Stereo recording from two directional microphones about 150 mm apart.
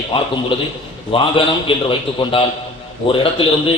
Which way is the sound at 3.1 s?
35° left (ahead or behind).